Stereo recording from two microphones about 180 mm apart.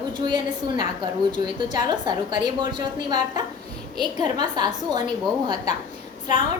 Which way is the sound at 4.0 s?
25° right (ahead or behind).